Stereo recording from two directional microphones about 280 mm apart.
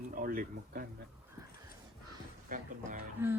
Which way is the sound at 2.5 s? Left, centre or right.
Right.